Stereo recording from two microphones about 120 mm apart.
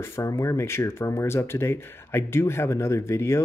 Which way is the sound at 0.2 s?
25° left (ahead or behind).